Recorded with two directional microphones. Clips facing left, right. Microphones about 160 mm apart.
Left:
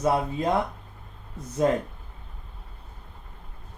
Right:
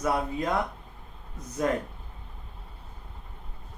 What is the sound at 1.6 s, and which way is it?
Speech, 30° left (ahead or behind).